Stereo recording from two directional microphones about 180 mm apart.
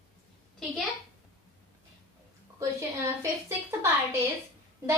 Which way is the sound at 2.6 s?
15° right (ahead or behind).